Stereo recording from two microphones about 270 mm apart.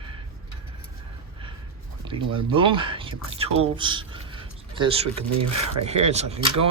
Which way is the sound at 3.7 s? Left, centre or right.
Centre.